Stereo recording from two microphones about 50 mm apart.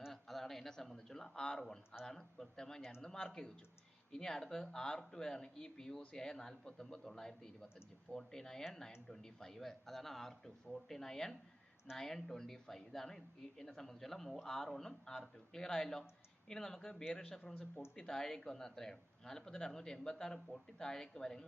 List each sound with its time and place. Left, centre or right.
0.1 s a sound: centre
2.0 s a woman's voice: centre
17.5 s speech: left
17.9 s a woman's voice: centre